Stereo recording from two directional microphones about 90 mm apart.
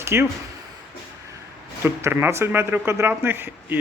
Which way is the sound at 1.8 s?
30° right (ahead or behind).